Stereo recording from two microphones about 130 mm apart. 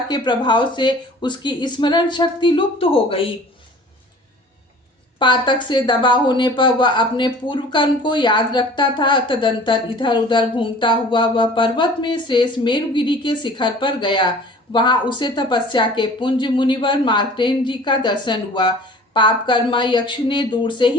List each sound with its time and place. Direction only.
0.1 s a woman's voice: 35° left (ahead or behind)
5.2 s a woman's voice: 35° left (ahead or behind)